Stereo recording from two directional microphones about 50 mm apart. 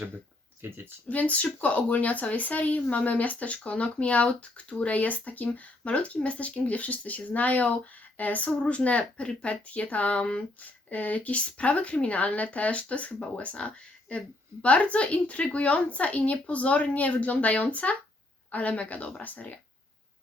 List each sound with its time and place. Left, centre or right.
0.6 s speech: right
1.0 s a woman's voice: left